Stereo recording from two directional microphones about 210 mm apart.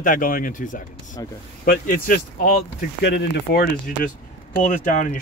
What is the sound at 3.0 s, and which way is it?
Speech, 50° left (ahead or behind).